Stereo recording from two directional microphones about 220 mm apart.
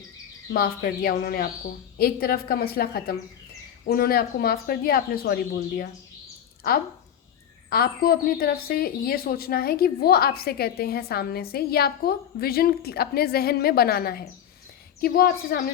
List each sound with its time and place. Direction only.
0.5 s a woman's voice: 45° left (ahead or behind)
7.7 s a woman's voice: 45° left (ahead or behind)